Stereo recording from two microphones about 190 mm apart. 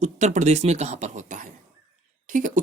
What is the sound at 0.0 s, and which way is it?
Speech, 40° right (ahead or behind).